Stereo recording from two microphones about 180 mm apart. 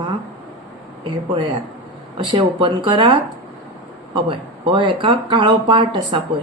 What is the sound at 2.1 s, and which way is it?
Speech, 30° right (ahead or behind).